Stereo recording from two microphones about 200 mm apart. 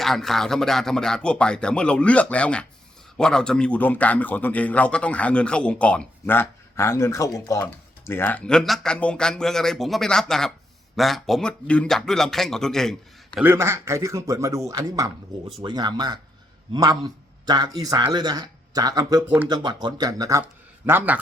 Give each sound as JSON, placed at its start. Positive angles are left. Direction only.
{"t": 0.0, "sound": "a man's voice", "side_deg": 0}
{"t": 13.4, "sound": "speech", "side_deg": -10}